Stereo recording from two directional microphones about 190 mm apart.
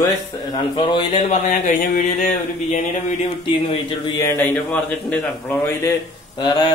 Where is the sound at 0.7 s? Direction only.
25° left (ahead or behind).